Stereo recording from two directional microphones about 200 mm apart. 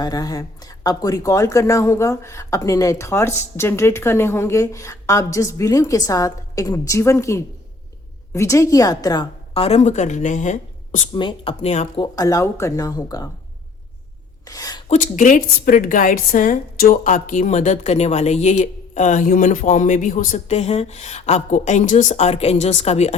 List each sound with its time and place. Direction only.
0.0 s a woman's voice: 20° left (ahead or behind)
9.6 s a woman's voice: 35° left (ahead or behind)
11.1 s speech: 25° left (ahead or behind)
12.1 s speech: 15° left (ahead or behind)
14.4 s speech: 15° left (ahead or behind)
14.8 s a woman's voice: 40° left (ahead or behind)